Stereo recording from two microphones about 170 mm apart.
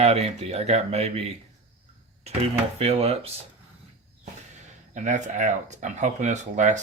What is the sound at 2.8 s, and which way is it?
Speech, 35° right (ahead or behind).